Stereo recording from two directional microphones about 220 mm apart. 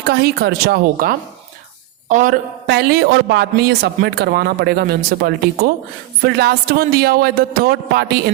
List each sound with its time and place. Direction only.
0.0 s a man's voice: 50° right (ahead or behind)
2.6 s speech: 50° right (ahead or behind)